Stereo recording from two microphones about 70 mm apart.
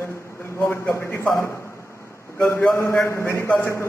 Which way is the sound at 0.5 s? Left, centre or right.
Left.